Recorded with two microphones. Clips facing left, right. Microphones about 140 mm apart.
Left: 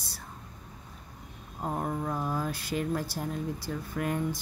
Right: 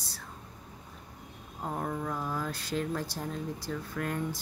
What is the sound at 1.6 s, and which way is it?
Speech, 15° left (ahead or behind).